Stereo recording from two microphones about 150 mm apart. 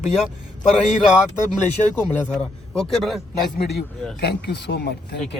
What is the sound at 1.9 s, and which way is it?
A man's voice, 5° left (ahead or behind).